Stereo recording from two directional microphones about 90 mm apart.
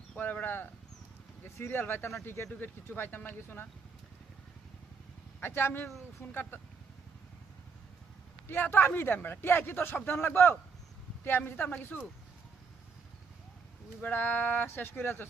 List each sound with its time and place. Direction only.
0.2 s a sound: 20° left (ahead or behind)
1.5 s speech: 25° left (ahead or behind)
5.4 s speech: 25° left (ahead or behind)
8.4 s speech: 25° left (ahead or behind)
14.0 s speech: 20° left (ahead or behind)